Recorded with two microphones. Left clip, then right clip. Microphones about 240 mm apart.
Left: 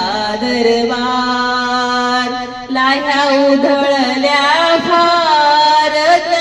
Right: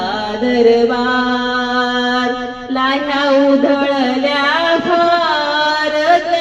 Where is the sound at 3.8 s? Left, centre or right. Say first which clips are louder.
Left 2 dB; left.